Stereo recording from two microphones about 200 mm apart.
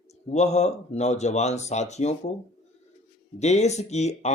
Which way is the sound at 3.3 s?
35° left (ahead or behind).